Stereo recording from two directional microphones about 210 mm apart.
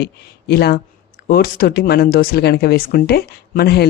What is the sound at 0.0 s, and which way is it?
Speech, 50° left (ahead or behind).